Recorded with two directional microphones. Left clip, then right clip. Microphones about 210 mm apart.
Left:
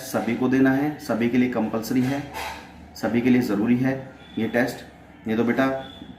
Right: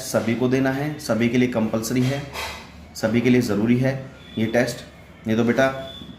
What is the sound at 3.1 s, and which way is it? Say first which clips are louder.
Speech: right 1 dB; 35° right (ahead or behind).